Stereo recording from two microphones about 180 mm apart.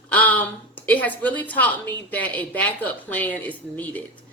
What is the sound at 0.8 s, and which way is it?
Speech, 10° left (ahead or behind).